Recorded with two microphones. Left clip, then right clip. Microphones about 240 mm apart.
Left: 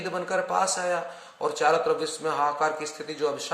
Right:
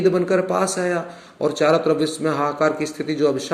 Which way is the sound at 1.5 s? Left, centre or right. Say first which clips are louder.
Right 5 dB; centre.